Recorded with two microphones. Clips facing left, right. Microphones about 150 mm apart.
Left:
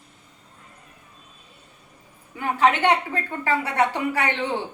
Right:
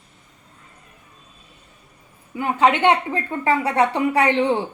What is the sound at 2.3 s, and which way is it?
A woman's voice, 20° right (ahead or behind).